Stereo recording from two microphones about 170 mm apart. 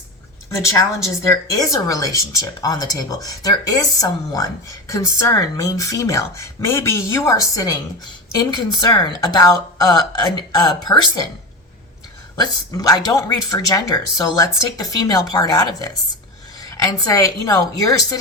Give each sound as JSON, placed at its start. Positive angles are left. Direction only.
{"t": 1.2, "sound": "speech", "side_deg": 20}
{"t": 12.4, "sound": "speech", "side_deg": 25}